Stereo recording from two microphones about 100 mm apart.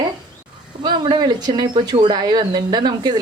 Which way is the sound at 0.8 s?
50° right (ahead or behind).